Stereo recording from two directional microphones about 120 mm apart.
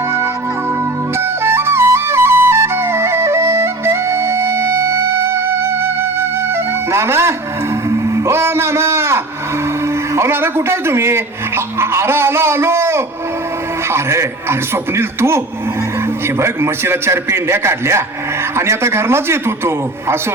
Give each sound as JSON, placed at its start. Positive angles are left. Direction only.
{"t": 1.2, "sound": "music", "side_deg": -20}
{"t": 9.8, "sound": "speech", "side_deg": -20}